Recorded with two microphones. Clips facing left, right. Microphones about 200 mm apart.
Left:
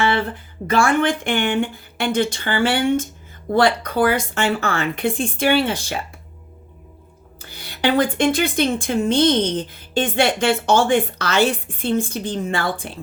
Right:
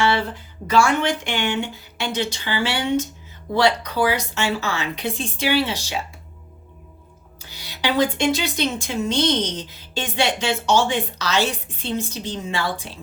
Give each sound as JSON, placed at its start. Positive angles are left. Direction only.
{"t": 0.0, "sound": "a sound", "side_deg": 55}
{"t": 0.7, "sound": "a woman's voice", "side_deg": 55}
{"t": 7.4, "sound": "a woman's voice", "side_deg": 55}